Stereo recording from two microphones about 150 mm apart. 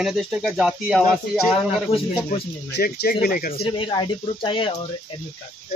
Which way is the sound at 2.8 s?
90° left.